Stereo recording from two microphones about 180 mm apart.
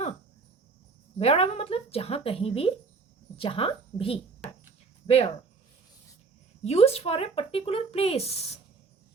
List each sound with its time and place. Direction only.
1.2 s speech: 35° left (ahead or behind)
6.6 s speech: 35° left (ahead or behind)